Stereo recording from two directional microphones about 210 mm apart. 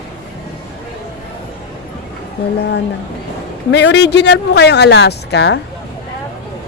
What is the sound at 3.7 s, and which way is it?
Speech, 55° left (ahead or behind).